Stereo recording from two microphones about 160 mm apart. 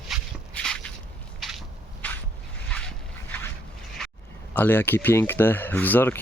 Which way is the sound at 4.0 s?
5° left (ahead or behind).